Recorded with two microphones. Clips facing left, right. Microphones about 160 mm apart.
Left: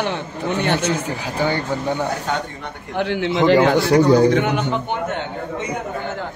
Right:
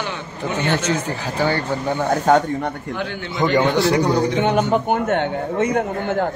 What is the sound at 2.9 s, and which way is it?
Speech, 75° left (ahead or behind).